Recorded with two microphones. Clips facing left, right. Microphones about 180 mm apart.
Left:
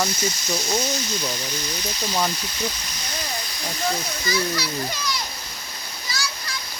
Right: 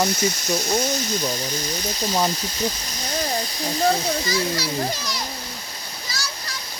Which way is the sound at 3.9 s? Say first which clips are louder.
Right 4 dB; 40° right (ahead or behind).